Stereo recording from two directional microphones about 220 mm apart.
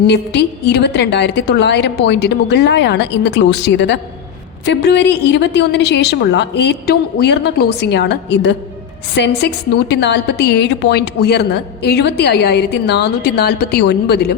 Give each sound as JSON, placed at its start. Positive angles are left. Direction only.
{"t": 0.1, "sound": "a woman's voice", "side_deg": 50}